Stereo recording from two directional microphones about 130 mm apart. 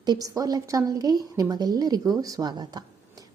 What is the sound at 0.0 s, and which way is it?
Speech, 30° right (ahead or behind).